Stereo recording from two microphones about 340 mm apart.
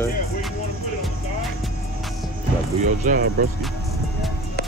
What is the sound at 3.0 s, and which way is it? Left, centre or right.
Speech, right.